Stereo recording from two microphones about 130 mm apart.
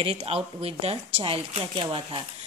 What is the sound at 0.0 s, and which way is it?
Speech, 50° right (ahead or behind).